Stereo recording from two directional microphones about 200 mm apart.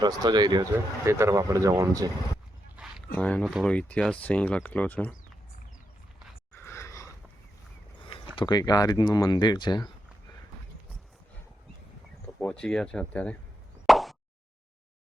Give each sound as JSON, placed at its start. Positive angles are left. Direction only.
{"t": 0.0, "sound": "speech", "side_deg": -20}
{"t": 3.2, "sound": "speech", "side_deg": 5}
{"t": 6.5, "sound": "a sound", "side_deg": 15}
{"t": 8.4, "sound": "speech", "side_deg": 20}
{"t": 12.4, "sound": "speech", "side_deg": 5}
{"t": 13.8, "sound": "plop", "side_deg": 0}